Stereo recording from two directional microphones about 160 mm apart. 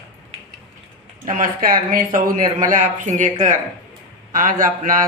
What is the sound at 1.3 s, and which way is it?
Speech, 60° right (ahead or behind).